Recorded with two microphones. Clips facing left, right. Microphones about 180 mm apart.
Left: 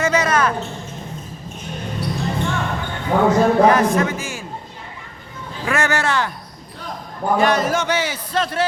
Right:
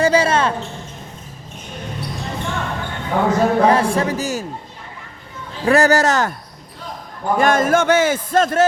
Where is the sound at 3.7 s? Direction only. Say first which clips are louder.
Even; 30° right (ahead or behind).